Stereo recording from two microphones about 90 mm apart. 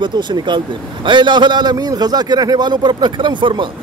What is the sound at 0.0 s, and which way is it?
A man's voice, 60° right (ahead or behind).